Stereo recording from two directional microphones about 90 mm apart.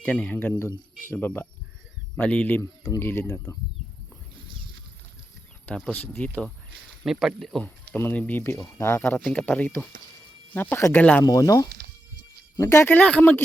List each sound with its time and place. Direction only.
0.0 s speech: 15° left (ahead or behind)
2.6 s speech: 35° left (ahead or behind)
3.1 s speech: 25° left (ahead or behind)
5.9 s speech: 15° left (ahead or behind)
7.0 s speech: 5° right (ahead or behind)
7.6 s speech: 20° left (ahead or behind)
9.1 s speech: 10° left (ahead or behind)
11.3 s speech: 40° left (ahead or behind)
12.5 s speech: 30° left (ahead or behind)
13.0 s speech: 15° left (ahead or behind)